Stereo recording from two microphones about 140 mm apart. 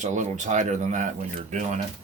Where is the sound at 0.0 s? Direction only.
60° right (ahead or behind).